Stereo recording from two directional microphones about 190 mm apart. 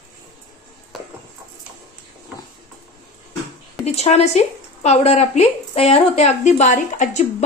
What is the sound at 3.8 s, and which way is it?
Speech, 35° left (ahead or behind).